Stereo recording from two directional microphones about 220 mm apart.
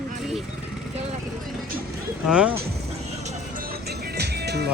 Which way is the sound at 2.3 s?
5° right (ahead or behind).